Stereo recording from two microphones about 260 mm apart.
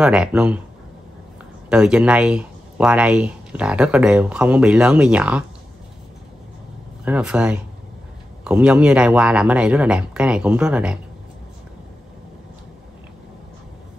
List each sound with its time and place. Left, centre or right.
0.0 s speech: centre
1.7 s speech: centre
7.1 s speech: centre